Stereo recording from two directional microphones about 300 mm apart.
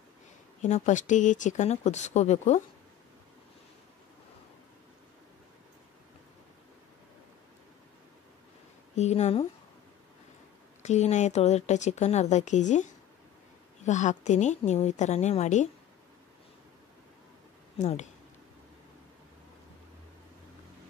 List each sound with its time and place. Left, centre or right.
0.6 s a woman's voice: left
8.9 s a woman's voice: left
10.8 s a woman's voice: left
17.7 s speech: left